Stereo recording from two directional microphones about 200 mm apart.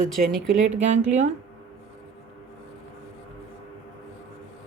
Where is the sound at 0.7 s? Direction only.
35° right (ahead or behind).